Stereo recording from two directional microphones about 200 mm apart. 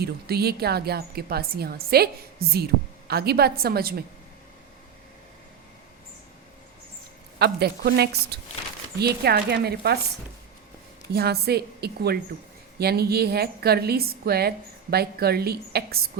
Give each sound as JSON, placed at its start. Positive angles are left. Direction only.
{"t": 0.0, "sound": "a woman's voice", "side_deg": -50}
{"t": 7.3, "sound": "a woman's voice", "side_deg": -55}
{"t": 11.1, "sound": "a woman's voice", "side_deg": -55}